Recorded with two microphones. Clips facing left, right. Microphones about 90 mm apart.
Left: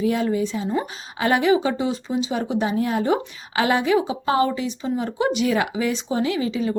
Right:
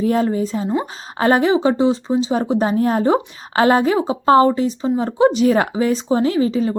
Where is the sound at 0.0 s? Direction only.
40° right (ahead or behind).